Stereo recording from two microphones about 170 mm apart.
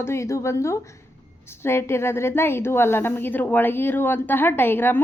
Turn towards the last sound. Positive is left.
turn(degrees=10)  # may be behind; listen again after turning